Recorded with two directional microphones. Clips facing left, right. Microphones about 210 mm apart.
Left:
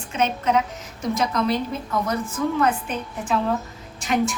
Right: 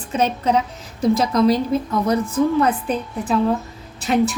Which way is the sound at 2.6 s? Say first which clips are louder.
Right 4 dB; 35° right (ahead or behind).